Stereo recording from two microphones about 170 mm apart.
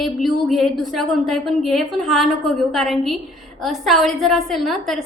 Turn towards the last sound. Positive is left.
turn(degrees=0)  # may be behind; listen again after turning